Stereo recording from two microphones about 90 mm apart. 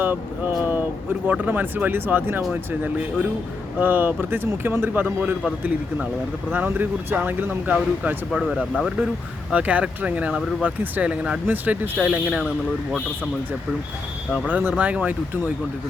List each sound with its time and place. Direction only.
0.0 s vehicle: 20° right (ahead or behind)
1.3 s speech: 20° right (ahead or behind)
6.5 s speech: 20° right (ahead or behind)
8.3 s speech: 5° right (ahead or behind)
9.5 s speech: 15° right (ahead or behind)
14.4 s speech: 20° right (ahead or behind)